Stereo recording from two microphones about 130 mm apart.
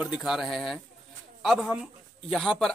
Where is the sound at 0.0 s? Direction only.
5° right (ahead or behind).